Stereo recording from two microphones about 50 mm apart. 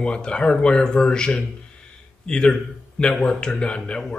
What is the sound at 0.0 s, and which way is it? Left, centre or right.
A man's voice, centre.